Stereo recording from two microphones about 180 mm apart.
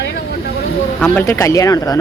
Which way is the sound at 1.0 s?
15° left (ahead or behind).